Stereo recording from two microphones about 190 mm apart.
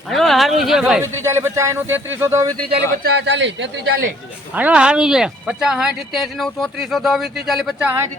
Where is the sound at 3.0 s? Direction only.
65° right (ahead or behind).